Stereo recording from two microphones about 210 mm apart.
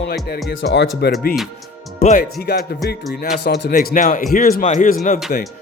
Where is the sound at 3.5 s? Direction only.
55° left (ahead or behind).